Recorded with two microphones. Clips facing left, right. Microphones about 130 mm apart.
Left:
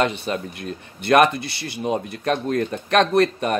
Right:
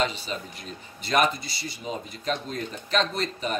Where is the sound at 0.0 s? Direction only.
60° left (ahead or behind).